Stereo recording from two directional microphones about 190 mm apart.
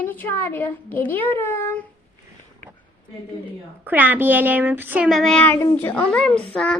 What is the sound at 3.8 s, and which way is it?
Speech, 10° right (ahead or behind).